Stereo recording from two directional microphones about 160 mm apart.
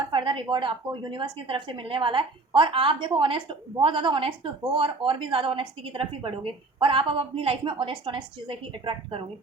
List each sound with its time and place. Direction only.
0.1 s a woman's voice: 30° right (ahead or behind)